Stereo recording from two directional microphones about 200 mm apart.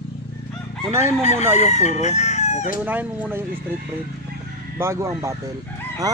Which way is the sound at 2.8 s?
5° right (ahead or behind).